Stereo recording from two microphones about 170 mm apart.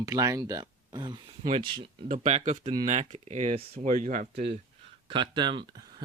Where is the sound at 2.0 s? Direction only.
45° right (ahead or behind).